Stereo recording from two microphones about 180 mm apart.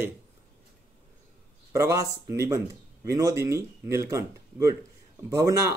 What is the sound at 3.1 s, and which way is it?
Speech, 20° right (ahead or behind).